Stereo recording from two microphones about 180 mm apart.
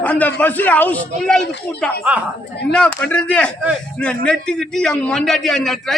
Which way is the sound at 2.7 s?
5° left (ahead or behind).